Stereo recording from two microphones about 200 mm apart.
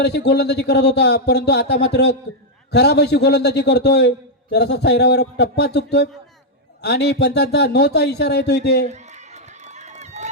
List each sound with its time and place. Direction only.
0.0 s speech: 55° left (ahead or behind)
8.9 s run: 35° right (ahead or behind)